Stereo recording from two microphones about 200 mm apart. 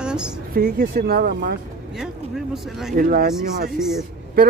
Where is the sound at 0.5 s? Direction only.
50° right (ahead or behind).